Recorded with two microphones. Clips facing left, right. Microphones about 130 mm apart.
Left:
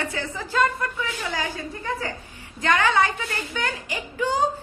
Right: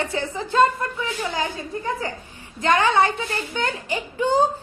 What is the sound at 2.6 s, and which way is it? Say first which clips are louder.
Speech: right 2 dB; 25° right (ahead or behind).